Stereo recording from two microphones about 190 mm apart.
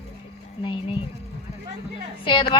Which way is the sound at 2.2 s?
25° left (ahead or behind).